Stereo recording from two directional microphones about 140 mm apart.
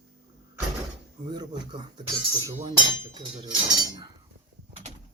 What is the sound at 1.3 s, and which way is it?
Speech, 30° right (ahead or behind).